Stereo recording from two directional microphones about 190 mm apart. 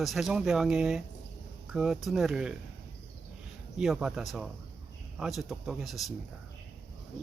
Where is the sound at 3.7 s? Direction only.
5° right (ahead or behind).